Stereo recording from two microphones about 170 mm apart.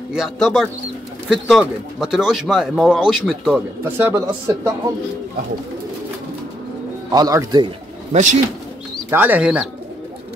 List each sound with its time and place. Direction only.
0.1 s speech: centre (ahead or behind)
3.8 s speech: 15° right (ahead or behind)
7.1 s speech: 20° right (ahead or behind)
8.1 s speech: 45° right (ahead or behind)
9.1 s speech: 10° right (ahead or behind)